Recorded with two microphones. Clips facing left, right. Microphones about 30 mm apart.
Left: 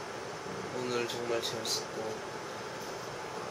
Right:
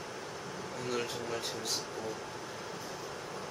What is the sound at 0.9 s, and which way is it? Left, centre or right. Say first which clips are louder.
Speech: left 2 dB; centre.